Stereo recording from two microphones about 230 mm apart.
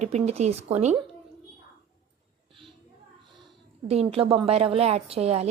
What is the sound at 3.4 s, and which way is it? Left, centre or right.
A woman's voice, right.